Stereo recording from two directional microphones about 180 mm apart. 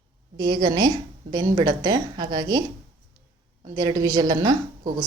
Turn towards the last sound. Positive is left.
turn(degrees=-20)  # may be behind; listen again after turning